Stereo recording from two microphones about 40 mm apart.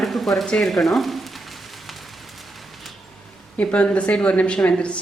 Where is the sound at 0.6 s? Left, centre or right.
Centre.